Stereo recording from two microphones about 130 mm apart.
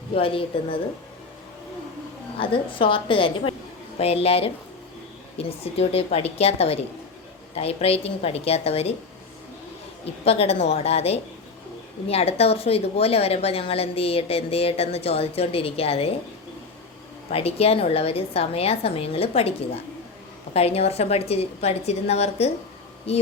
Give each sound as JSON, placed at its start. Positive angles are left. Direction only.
{"t": 0.1, "sound": "a woman's voice", "side_deg": 45}
{"t": 2.4, "sound": "a woman's voice", "side_deg": 40}
{"t": 5.7, "sound": "a woman's voice", "side_deg": 50}
{"t": 10.2, "sound": "a woman's voice", "side_deg": 50}
{"t": 17.3, "sound": "a woman's voice", "side_deg": 50}